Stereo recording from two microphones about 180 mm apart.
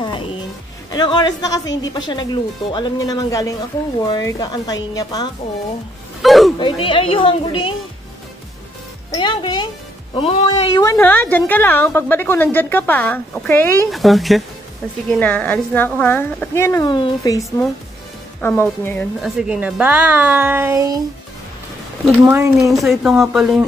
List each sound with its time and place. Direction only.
0.0 s music: 25° left (ahead or behind)
0.9 s a woman's voice: 25° left (ahead or behind)
6.2 s speech: centre (ahead or behind)
6.6 s a woman's voice: 30° left (ahead or behind)
9.1 s a woman's voice: 25° left (ahead or behind)
13.9 s a woman's voice: centre (ahead or behind); by 17.4 s 25° left (ahead or behind)
18.4 s a woman's voice: 10° left (ahead or behind)
19.2 s a woman's voice: 5° right (ahead or behind)
22.2 s a woman's voice: 15° right (ahead or behind)
22.6 s speech: centre (ahead or behind)